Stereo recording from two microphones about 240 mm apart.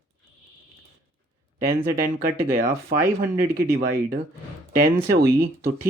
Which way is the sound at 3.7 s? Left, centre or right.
Right.